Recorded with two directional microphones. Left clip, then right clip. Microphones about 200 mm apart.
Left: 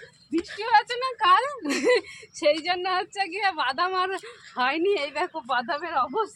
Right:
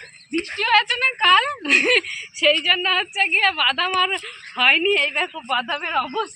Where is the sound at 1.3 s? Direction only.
10° left (ahead or behind).